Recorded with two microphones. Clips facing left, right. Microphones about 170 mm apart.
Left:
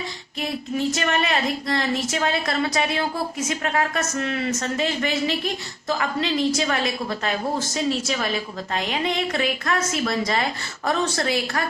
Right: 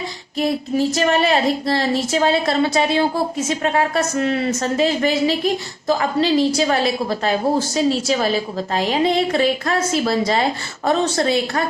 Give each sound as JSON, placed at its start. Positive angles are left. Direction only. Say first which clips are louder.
{"t": 0.3, "sound": "speech", "louder": "right 7 dB", "side_deg": -35}